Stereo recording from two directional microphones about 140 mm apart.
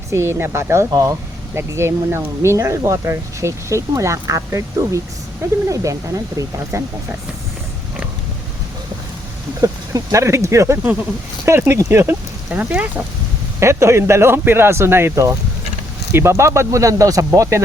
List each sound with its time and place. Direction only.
0.1 s speech: 20° right (ahead or behind)
9.6 s speech: 25° right (ahead or behind)
13.6 s speech: 20° right (ahead or behind)